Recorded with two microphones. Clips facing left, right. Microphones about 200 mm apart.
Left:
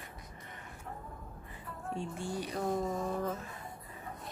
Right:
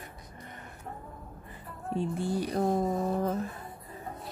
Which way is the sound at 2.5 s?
40° right (ahead or behind).